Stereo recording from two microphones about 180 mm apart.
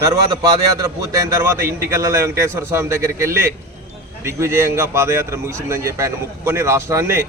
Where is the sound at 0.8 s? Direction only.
20° right (ahead or behind).